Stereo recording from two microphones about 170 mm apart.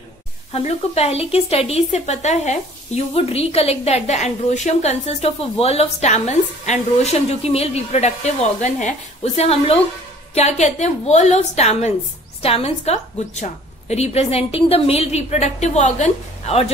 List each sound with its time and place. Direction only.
0.5 s speech: 40° left (ahead or behind)